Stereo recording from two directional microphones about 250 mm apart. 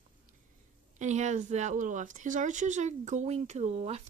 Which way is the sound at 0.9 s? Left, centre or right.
Right.